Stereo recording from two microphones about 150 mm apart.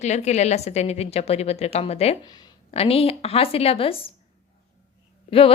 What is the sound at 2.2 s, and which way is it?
Speech, 25° left (ahead or behind).